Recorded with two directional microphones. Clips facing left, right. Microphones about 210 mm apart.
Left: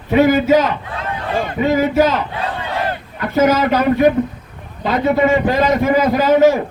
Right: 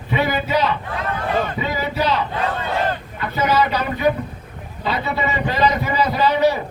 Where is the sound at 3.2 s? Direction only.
45° left (ahead or behind).